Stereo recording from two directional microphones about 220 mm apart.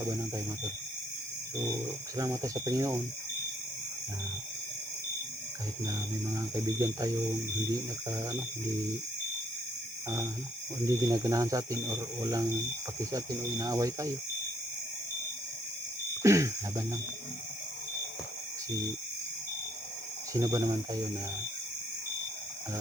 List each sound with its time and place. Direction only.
2.1 s speech: 15° right (ahead or behind)
6.3 s speech: 15° right (ahead or behind)
10.8 s speech: 15° right (ahead or behind)
16.2 s speech: 15° right (ahead or behind)
20.3 s speech: 15° right (ahead or behind)